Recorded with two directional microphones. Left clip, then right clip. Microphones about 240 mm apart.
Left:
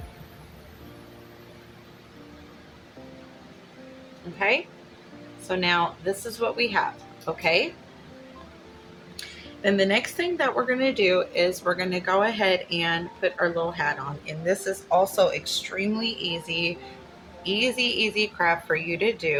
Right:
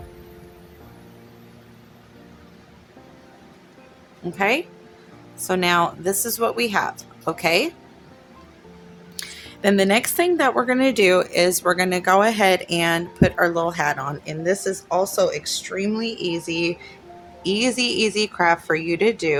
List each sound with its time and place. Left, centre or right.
4.4 s a woman's voice: right
9.1 s a woman's voice: right